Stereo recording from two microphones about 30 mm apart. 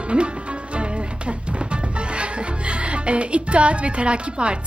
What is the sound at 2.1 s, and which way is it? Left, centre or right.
Speech, right.